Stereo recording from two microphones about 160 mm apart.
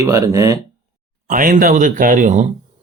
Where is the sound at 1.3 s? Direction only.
60° right (ahead or behind).